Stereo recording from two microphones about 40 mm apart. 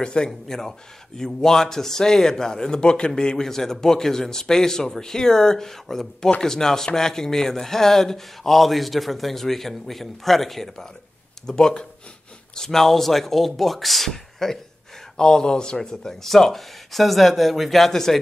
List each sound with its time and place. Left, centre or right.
0.0 s speech: left
11.4 s speech: centre
15.1 s speech: centre